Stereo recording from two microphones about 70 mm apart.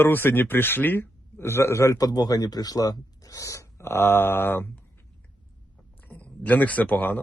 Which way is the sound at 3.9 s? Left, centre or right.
Left.